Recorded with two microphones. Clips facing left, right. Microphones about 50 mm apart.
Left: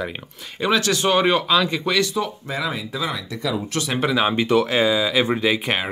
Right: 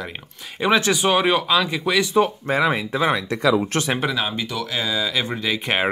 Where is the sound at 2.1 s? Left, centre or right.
Right.